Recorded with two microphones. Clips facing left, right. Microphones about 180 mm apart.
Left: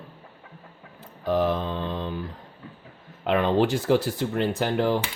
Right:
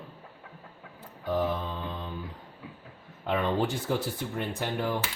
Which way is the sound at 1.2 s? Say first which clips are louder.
Left 5 dB; 90° left.